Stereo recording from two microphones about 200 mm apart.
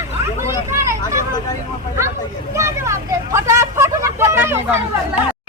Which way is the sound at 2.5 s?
15° right (ahead or behind).